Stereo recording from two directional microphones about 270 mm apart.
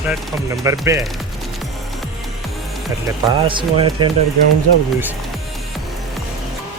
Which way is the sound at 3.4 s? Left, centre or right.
Centre.